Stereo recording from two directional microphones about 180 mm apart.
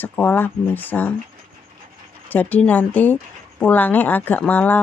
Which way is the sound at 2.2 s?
10° left (ahead or behind).